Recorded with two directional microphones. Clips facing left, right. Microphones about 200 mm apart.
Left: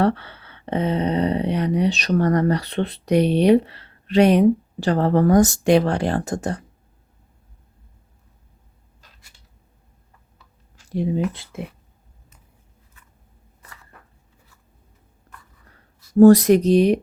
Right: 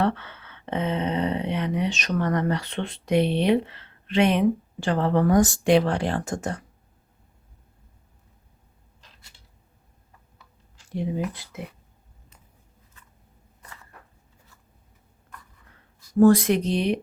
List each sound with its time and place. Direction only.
0.0 s speech: 35° left (ahead or behind)
11.3 s speech: 25° left (ahead or behind)
15.6 s speech: 40° left (ahead or behind)